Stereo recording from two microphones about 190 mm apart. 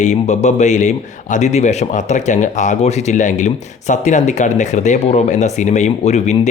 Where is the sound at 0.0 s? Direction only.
35° left (ahead or behind).